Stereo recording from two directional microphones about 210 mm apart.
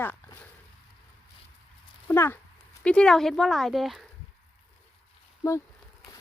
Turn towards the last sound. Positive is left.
turn(degrees=15)  # may be behind; listen again after turning